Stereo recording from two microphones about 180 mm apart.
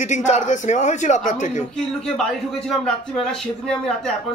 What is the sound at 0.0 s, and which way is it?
A man's voice, 40° left (ahead or behind).